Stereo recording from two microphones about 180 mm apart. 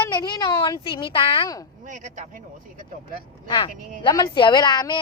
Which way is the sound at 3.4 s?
25° left (ahead or behind).